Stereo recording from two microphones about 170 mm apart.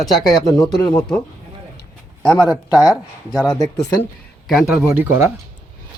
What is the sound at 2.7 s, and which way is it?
Speech, 20° left (ahead or behind).